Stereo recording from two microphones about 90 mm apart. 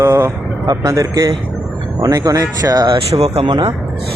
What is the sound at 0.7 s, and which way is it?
Speech, 40° right (ahead or behind).